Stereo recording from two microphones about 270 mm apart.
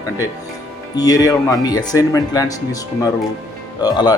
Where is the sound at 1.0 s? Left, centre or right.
Centre.